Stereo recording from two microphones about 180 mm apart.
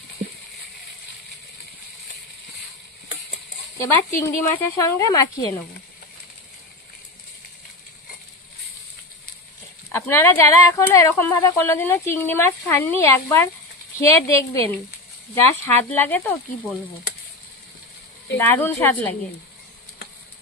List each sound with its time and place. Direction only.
3.8 s speech: 15° left (ahead or behind)
9.9 s speech: 15° left (ahead or behind)
15.8 s speech: 10° left (ahead or behind)
18.4 s speech: 10° left (ahead or behind)